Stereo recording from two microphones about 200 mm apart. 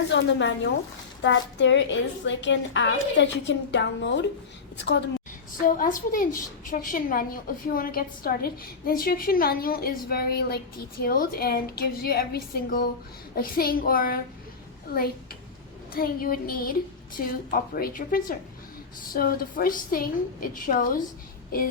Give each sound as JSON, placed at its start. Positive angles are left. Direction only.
{"t": 0.1, "sound": "a woman's voice", "side_deg": 60}
{"t": 5.6, "sound": "a woman's voice", "side_deg": 40}